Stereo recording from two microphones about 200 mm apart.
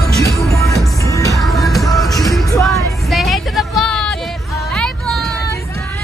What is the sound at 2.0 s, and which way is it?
Music, 15° left (ahead or behind).